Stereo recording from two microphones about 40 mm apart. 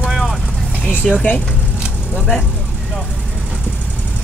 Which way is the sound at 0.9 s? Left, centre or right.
Left.